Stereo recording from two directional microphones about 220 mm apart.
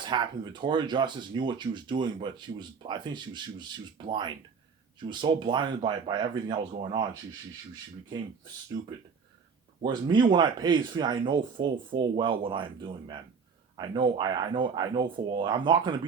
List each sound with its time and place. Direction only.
0.0 s speech: 20° right (ahead or behind)
9.8 s speech: 20° right (ahead or behind)